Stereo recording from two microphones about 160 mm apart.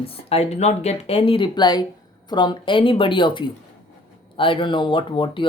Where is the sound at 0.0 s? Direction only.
35° left (ahead or behind).